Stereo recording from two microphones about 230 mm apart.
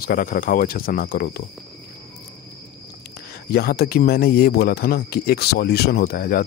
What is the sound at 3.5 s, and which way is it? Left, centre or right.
Speech, left.